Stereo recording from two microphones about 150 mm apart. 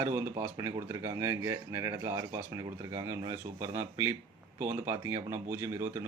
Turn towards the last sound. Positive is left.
turn(degrees=-20)  # may be behind; listen again after turning